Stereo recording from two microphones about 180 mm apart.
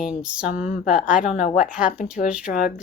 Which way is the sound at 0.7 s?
45° left (ahead or behind).